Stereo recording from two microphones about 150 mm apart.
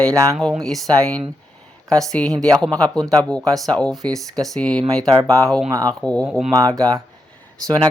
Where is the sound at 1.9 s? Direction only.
5° left (ahead or behind).